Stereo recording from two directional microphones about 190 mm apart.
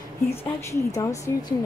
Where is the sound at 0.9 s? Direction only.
15° left (ahead or behind).